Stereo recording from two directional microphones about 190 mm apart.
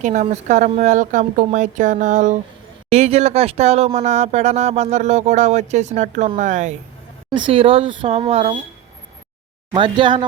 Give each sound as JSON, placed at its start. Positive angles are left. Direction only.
{"t": 0.0, "sound": "speech", "side_deg": -40}
{"t": 7.3, "sound": "speech", "side_deg": -25}
{"t": 9.7, "sound": "speech", "side_deg": -25}